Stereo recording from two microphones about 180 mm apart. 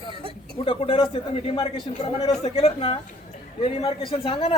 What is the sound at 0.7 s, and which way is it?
A man's voice, 30° left (ahead or behind).